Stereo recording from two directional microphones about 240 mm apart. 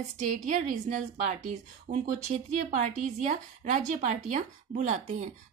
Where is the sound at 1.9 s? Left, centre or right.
Right.